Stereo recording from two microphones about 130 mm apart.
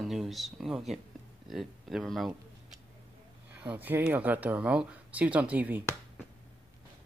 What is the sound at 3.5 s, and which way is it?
Speech, 15° right (ahead or behind).